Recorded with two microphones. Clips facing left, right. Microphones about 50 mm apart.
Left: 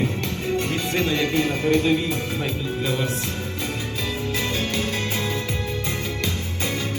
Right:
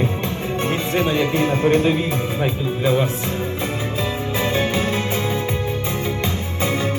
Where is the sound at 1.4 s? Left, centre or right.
Right.